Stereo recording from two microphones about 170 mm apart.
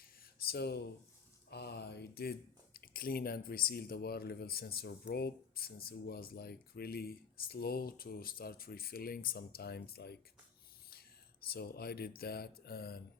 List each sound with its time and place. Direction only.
0.4 s speech: 70° left (ahead or behind)
1.5 s a sound: 75° left (ahead or behind)
2.7 s speech: 60° left (ahead or behind)
11.5 s speech: 65° left (ahead or behind)